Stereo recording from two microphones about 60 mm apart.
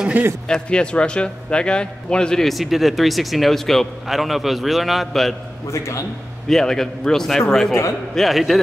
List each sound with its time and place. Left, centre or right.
0.2 s speech: right
0.5 s a man's voice: centre
5.7 s a man's voice: left
6.5 s a man's voice: centre